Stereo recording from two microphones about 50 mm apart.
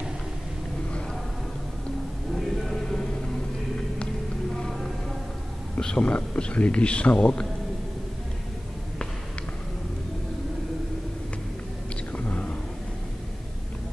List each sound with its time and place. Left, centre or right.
2.3 s music: centre
4.6 s music: centre
5.8 s speech: centre
12.1 s whispering: left